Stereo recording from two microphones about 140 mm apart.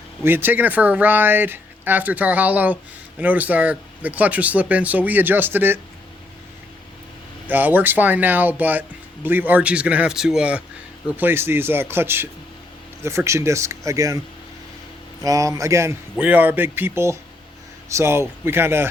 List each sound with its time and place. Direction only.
0.3 s speech: 15° right (ahead or behind)
7.4 s speech: 15° right (ahead or behind)
15.2 s speech: 25° right (ahead or behind)